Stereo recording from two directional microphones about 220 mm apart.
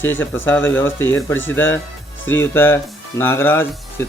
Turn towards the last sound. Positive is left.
turn(degrees=10)  # may be behind; listen again after turning